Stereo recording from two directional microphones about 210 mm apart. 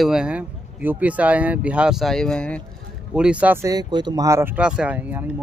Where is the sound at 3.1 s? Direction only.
5° right (ahead or behind).